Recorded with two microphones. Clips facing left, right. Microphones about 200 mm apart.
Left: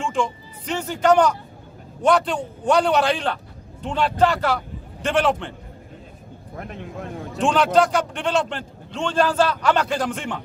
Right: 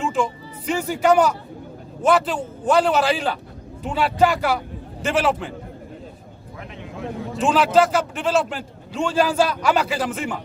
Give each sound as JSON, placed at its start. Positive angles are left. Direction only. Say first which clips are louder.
{"t": 0.0, "sound": "a sound", "louder": "right 1 dB", "side_deg": -5}
{"t": 2.0, "sound": "a man's voice", "louder": "even", "side_deg": -5}
{"t": 6.6, "sound": "vehicle", "louder": "even", "side_deg": 50}
{"t": 7.3, "sound": "a man's voice", "louder": "right 1 dB", "side_deg": -5}